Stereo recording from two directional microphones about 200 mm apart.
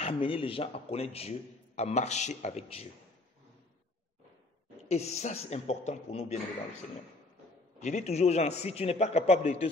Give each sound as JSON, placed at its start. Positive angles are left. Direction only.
{"t": 0.0, "sound": "a man's voice", "side_deg": 25}
{"t": 4.8, "sound": "a man's voice", "side_deg": 35}
{"t": 7.8, "sound": "a man's voice", "side_deg": 35}